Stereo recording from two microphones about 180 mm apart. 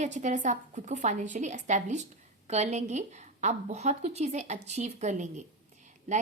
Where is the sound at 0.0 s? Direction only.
40° right (ahead or behind).